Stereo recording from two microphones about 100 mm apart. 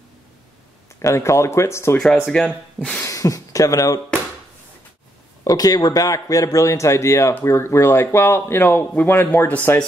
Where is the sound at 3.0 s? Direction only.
35° left (ahead or behind).